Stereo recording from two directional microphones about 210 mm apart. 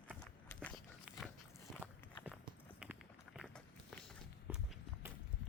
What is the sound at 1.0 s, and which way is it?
Dog, centre (ahead or behind).